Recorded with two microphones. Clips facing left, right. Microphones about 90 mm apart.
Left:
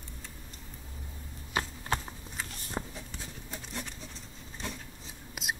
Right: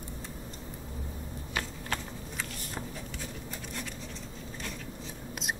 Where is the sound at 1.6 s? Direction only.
25° left (ahead or behind).